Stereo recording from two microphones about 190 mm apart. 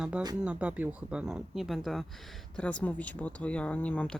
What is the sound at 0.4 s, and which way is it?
Speech, 5° right (ahead or behind).